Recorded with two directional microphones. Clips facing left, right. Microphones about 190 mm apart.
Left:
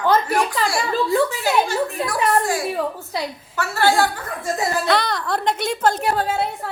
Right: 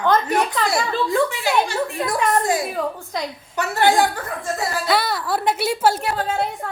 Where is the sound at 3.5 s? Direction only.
20° right (ahead or behind).